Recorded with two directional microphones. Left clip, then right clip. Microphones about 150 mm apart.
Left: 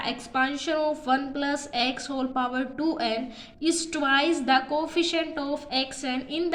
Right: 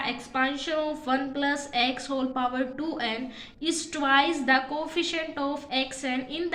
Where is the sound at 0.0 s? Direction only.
35° left (ahead or behind).